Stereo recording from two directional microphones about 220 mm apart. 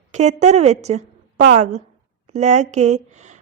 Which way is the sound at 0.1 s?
30° right (ahead or behind).